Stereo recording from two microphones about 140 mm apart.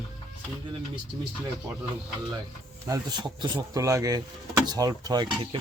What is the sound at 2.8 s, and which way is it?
Speech, 25° right (ahead or behind).